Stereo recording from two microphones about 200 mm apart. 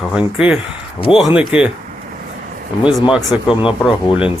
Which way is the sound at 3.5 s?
25° left (ahead or behind).